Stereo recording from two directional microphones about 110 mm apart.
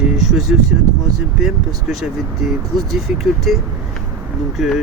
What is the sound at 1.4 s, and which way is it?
Speech, 5° right (ahead or behind).